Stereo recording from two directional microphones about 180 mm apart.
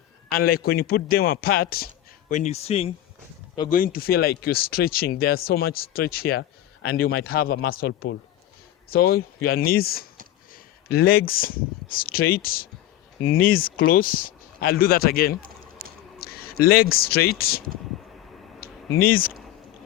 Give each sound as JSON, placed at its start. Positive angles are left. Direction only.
{"t": 0.3, "sound": "speech", "side_deg": 55}
{"t": 2.3, "sound": "speech", "side_deg": 40}
{"t": 3.7, "sound": "speech", "side_deg": 50}
{"t": 18.6, "sound": "a sound", "side_deg": 55}